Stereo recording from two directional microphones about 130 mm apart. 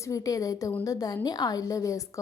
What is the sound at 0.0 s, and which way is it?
A woman's voice, 25° left (ahead or behind).